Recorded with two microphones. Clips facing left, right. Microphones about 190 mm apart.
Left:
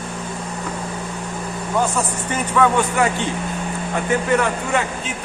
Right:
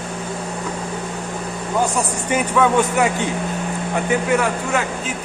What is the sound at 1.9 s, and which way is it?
Speech, 10° right (ahead or behind).